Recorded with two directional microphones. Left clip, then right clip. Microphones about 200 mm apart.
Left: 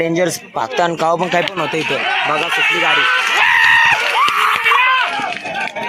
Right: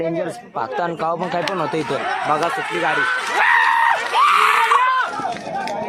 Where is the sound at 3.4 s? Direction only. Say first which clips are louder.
Left 3 dB; 45° right (ahead or behind).